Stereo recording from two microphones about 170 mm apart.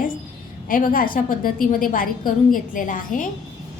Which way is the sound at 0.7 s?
55° left (ahead or behind).